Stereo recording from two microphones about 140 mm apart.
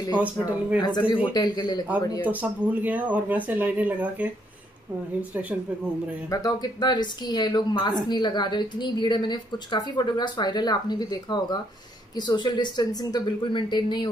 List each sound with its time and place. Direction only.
0.1 s speech: 10° right (ahead or behind)
0.7 s a man's voice: 30° left (ahead or behind)
2.2 s speech: 10° right (ahead or behind)
6.3 s a woman's voice: 30° left (ahead or behind)